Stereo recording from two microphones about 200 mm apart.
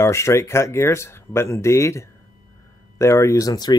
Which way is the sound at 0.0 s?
15° left (ahead or behind).